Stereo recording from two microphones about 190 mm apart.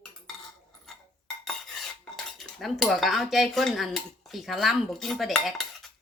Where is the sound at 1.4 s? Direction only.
Centre (ahead or behind).